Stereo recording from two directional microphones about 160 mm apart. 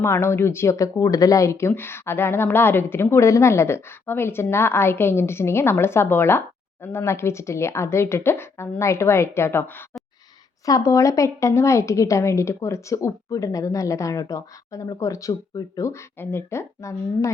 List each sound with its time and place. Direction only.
0.0 s a woman's voice: 15° left (ahead or behind)